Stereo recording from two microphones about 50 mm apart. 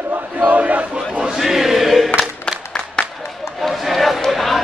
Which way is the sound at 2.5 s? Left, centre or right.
Centre.